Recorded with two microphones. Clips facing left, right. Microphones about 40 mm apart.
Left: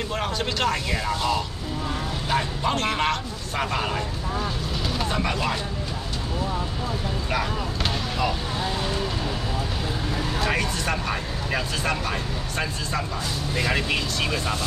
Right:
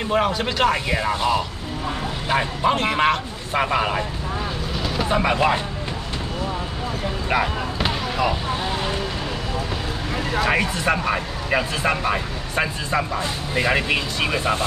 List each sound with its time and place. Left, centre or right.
0.1 s speech: centre
5.1 s speech: right
7.2 s vehicle: centre
10.4 s speech: centre